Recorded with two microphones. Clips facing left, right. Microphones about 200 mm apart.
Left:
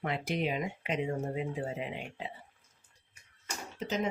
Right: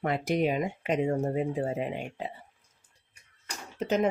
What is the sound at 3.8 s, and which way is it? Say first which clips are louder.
Speech: right 7 dB; 60° right (ahead or behind).